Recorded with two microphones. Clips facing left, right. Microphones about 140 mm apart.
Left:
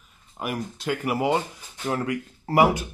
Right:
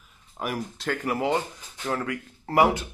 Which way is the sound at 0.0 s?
Centre (ahead or behind).